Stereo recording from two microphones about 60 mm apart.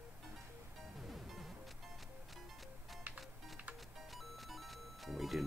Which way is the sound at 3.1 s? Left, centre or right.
Right.